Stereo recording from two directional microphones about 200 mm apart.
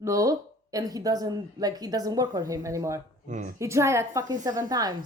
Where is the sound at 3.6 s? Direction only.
15° right (ahead or behind).